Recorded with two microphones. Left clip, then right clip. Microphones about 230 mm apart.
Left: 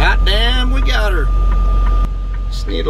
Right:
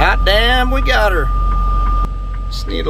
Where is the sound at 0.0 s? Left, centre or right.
Centre.